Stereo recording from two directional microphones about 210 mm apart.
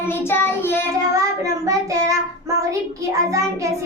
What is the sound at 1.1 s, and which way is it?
Child singing, 15° right (ahead or behind).